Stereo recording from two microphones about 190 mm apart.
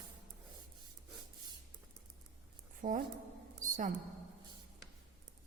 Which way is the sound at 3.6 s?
45° right (ahead or behind).